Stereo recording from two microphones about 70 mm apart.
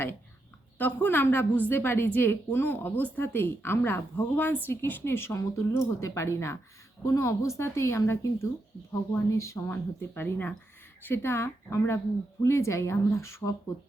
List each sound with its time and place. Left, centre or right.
0.8 s a woman's voice: left